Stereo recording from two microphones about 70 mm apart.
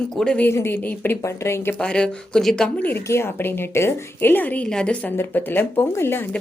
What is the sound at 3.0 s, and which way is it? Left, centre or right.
A woman's voice, left.